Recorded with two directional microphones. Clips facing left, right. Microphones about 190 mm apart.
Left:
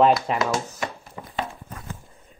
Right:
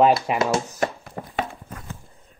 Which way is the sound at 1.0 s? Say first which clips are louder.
Right 2 dB; 60° right (ahead or behind).